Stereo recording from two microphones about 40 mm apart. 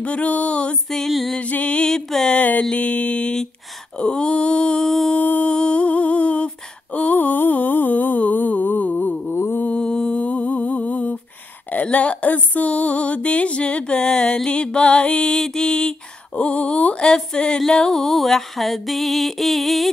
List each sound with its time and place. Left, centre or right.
0.0 s music: left
0.8 s a sound: centre
1.4 s music: left
2.3 s a sound: left
2.7 s music: left
4.8 s a sound: centre
5.1 s music: left
5.5 s humming: left
9.3 s mantra: left
9.8 s mantra: left
10.2 s music: left
15.3 s music: centre
17.6 s a sound: centre